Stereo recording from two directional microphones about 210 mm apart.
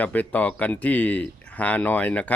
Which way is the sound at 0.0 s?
5° left (ahead or behind).